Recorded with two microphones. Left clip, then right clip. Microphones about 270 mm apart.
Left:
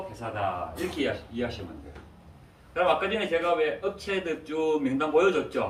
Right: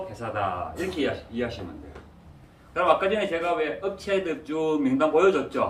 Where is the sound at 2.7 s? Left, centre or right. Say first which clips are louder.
Right 3 dB; centre.